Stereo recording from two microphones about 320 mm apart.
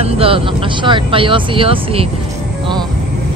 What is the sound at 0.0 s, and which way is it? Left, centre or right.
Speech, centre.